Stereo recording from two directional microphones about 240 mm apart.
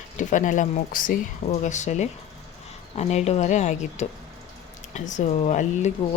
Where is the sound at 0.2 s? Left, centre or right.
Left.